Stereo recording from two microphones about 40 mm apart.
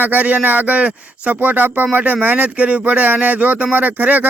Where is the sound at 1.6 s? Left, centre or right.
Right.